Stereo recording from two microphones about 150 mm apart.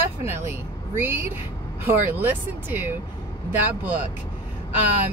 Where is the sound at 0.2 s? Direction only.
15° right (ahead or behind).